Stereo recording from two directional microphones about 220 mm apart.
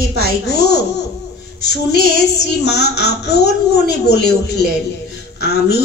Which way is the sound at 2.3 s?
50° left (ahead or behind).